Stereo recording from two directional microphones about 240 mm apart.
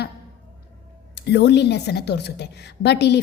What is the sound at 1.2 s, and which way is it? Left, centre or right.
A woman's voice, left.